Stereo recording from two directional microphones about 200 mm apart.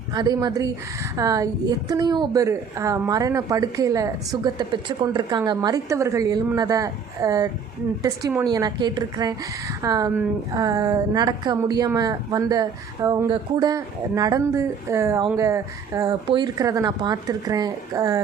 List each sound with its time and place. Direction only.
0.1 s a woman's voice: 20° right (ahead or behind)